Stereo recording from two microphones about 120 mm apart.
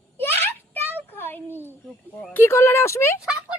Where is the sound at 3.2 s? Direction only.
10° right (ahead or behind).